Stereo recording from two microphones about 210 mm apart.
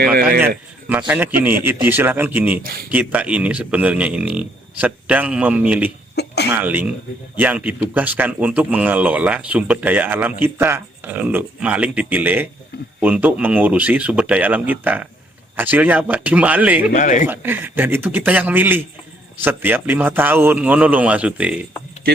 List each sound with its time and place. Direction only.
0.0 s speech: 45° right (ahead or behind)
0.4 s speech: 10° right (ahead or behind)
6.1 s cough: 50° left (ahead or behind)
6.5 s speech: 10° right (ahead or behind)
16.9 s speech: 35° left (ahead or behind)
17.2 s speech: 10° right (ahead or behind)